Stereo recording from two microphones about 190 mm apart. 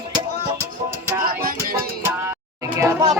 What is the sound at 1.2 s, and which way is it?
Music, 50° right (ahead or behind).